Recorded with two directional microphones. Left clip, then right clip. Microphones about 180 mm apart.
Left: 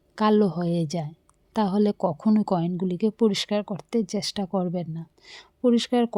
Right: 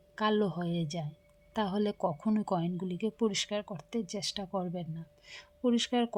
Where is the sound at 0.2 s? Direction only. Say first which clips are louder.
Left 8 dB; 30° left (ahead or behind).